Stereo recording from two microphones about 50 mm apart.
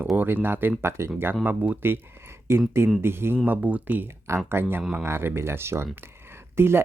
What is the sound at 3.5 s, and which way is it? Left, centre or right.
Speech, right.